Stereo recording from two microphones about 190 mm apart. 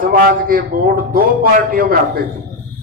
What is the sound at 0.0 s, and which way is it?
A man's voice, 50° right (ahead or behind).